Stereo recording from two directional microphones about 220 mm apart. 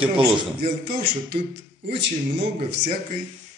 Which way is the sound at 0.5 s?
45° right (ahead or behind).